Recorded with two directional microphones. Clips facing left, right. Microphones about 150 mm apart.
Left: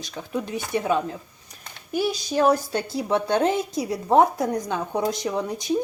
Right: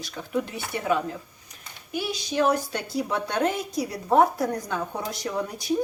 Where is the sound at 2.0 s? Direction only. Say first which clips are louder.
Left 3 dB; 35° left (ahead or behind).